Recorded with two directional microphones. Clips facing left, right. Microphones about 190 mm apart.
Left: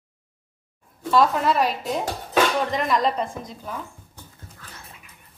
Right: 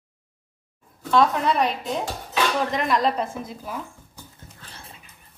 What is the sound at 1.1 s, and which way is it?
A woman's voice, centre (ahead or behind).